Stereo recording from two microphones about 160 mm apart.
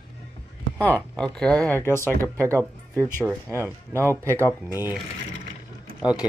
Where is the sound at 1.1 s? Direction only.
5° left (ahead or behind).